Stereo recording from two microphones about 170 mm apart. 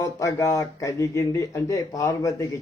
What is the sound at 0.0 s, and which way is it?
A man's voice, 20° left (ahead or behind).